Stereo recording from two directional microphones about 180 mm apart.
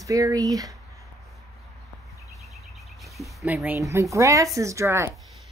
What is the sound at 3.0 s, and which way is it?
Speech, centre (ahead or behind).